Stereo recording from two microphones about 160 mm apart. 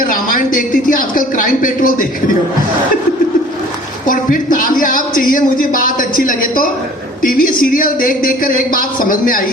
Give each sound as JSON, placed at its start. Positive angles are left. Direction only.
{"t": 0.0, "sound": "speech", "side_deg": 60}
{"t": 4.0, "sound": "speech", "side_deg": 60}